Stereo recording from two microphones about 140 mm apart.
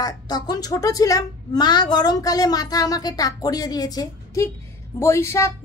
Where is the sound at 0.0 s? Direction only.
30° left (ahead or behind).